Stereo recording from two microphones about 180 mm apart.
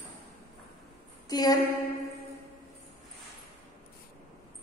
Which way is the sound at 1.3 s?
20° left (ahead or behind).